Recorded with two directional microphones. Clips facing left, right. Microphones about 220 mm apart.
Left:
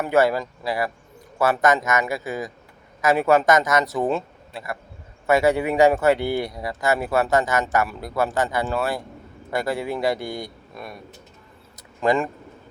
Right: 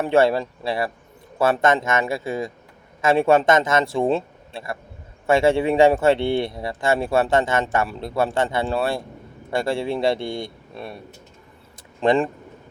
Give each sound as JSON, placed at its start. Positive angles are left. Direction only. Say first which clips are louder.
{"t": 0.0, "sound": "speech", "louder": "right 2 dB", "side_deg": -25}